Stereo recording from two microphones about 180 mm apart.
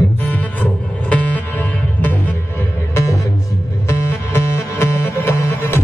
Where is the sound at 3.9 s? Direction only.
15° left (ahead or behind).